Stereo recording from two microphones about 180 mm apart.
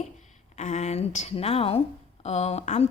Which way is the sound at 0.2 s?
40° left (ahead or behind).